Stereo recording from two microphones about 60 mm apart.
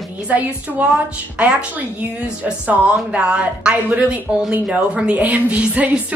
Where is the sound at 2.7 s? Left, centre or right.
Right.